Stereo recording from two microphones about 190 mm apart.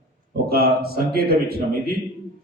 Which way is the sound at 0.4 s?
55° right (ahead or behind).